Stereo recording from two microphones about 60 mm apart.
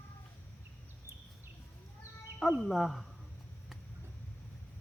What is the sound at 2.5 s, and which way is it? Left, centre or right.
Speech, centre.